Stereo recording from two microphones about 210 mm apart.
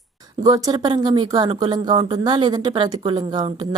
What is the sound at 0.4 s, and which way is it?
Speech, 15° right (ahead or behind).